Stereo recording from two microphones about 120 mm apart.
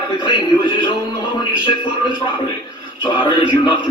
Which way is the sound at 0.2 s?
40° left (ahead or behind).